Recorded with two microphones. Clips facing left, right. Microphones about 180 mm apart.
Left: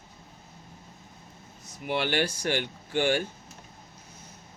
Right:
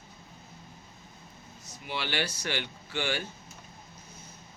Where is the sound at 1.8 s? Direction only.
55° left (ahead or behind).